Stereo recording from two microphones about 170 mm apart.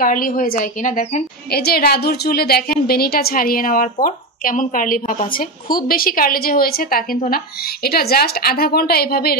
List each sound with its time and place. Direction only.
0.0 s a woman's voice: 55° left (ahead or behind)